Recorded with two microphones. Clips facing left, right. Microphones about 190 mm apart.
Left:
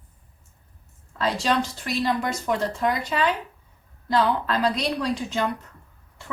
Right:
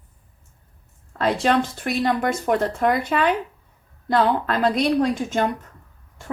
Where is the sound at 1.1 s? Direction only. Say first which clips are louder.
Right 4 dB; 55° right (ahead or behind).